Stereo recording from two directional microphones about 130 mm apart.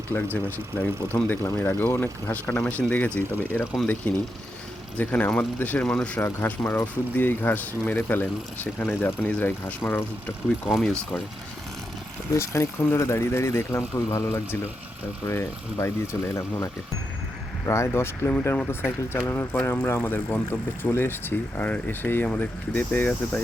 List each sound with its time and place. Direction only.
0.1 s speech: 15° left (ahead or behind)
1.3 s speech: 15° left (ahead or behind)
10.7 s speech: centre (ahead or behind)
12.3 s speech: 20° left (ahead or behind)
17.7 s speech: 20° left (ahead or behind)